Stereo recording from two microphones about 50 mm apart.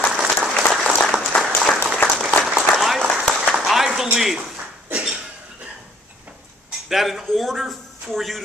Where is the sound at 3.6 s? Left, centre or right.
Centre.